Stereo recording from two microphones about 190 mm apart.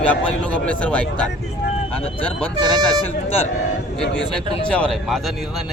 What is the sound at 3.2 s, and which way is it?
Speech, 30° left (ahead or behind).